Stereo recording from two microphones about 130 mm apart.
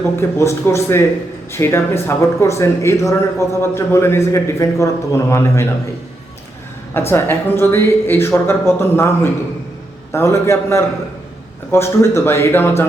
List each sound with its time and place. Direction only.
0.2 s speech: 20° left (ahead or behind)
7.1 s speech: 20° left (ahead or behind)